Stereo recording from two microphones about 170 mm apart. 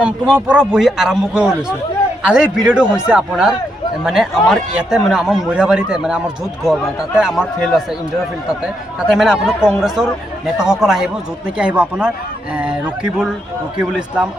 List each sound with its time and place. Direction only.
0.0 s speech: 5° right (ahead or behind)
9.1 s speech: centre (ahead or behind)